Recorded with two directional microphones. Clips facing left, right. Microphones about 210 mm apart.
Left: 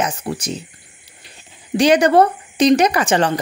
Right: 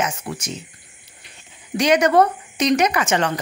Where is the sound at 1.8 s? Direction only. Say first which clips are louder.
Left 3 dB; 30° left (ahead or behind).